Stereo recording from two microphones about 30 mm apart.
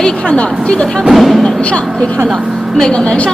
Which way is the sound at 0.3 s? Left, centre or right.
Left.